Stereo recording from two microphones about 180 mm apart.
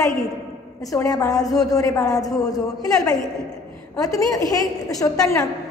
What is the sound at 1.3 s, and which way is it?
A woman's voice, 20° left (ahead or behind).